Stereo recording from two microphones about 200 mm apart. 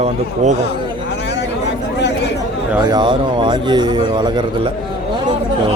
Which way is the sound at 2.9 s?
25° right (ahead or behind).